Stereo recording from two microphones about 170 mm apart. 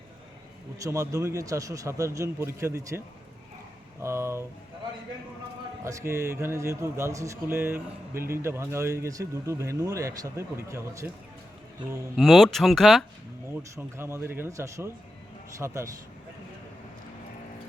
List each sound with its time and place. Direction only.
0.8 s a man's voice: 20° right (ahead or behind)
4.0 s speech: 15° right (ahead or behind)
5.8 s speech: 15° right (ahead or behind)
12.1 s speech: centre (ahead or behind)
13.5 s speech: 15° right (ahead or behind)